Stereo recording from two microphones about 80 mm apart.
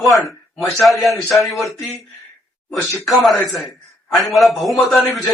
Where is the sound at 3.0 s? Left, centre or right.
Centre.